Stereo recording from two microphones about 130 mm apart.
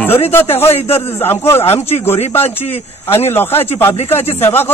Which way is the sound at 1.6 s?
50° left (ahead or behind).